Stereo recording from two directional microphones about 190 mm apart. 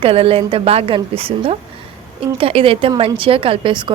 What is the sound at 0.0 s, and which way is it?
A woman's voice, 30° right (ahead or behind).